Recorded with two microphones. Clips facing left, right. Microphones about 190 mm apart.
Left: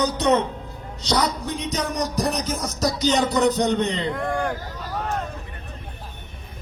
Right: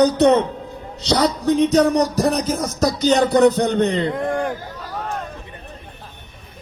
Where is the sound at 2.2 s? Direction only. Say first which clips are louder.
Right 6 dB; 55° right (ahead or behind).